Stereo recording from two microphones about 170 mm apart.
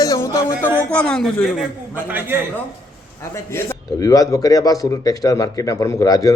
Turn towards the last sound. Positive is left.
turn(degrees=20)  # may be behind; listen again after turning